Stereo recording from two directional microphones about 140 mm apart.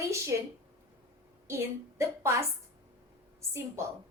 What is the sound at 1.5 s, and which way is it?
Speech, 20° right (ahead or behind).